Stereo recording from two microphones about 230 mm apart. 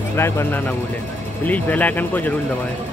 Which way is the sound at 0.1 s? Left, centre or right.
Centre.